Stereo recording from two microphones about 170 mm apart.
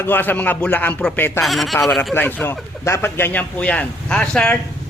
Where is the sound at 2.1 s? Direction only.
10° left (ahead or behind).